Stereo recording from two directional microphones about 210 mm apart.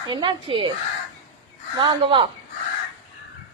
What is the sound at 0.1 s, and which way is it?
Speech, 25° right (ahead or behind).